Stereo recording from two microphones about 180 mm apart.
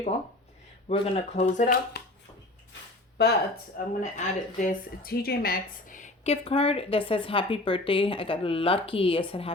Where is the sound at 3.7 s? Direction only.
45° left (ahead or behind).